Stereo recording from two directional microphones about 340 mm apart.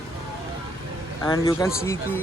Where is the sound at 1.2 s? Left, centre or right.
Centre.